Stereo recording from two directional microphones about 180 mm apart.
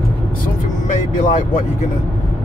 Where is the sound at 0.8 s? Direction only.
40° left (ahead or behind).